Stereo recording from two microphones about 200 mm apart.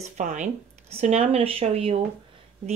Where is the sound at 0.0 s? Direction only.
35° right (ahead or behind).